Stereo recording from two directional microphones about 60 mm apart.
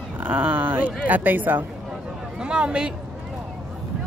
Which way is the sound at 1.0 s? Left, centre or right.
Right.